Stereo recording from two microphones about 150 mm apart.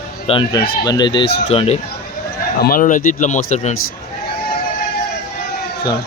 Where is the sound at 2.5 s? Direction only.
75° left (ahead or behind); by 3.7 s 50° left (ahead or behind).